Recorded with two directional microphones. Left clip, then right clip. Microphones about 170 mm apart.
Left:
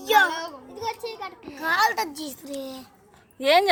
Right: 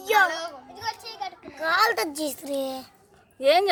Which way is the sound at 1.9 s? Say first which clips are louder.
Right 1 dB; 55° right (ahead or behind).